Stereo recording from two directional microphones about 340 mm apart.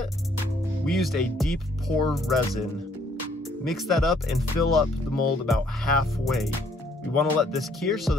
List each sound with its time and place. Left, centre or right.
0.8 s speech: centre
3.6 s speech: centre